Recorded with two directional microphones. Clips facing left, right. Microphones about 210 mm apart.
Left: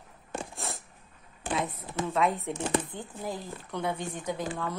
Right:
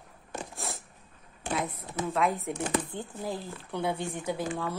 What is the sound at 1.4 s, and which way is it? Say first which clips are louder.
A woman's voice: left 1 dB; centre (ahead or behind).